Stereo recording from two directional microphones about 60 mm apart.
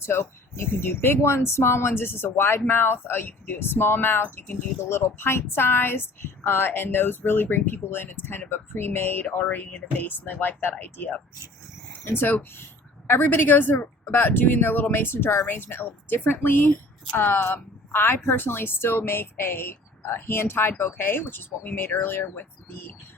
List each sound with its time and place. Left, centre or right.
0.0 s speech: left